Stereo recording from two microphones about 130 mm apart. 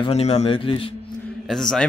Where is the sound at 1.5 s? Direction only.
Centre (ahead or behind).